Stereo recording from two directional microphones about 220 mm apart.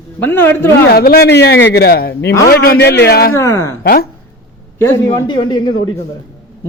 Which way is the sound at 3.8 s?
45° left (ahead or behind).